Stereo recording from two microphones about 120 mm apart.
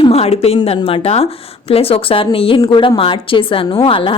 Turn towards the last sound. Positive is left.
turn(degrees=45)  # may be behind; listen again after turning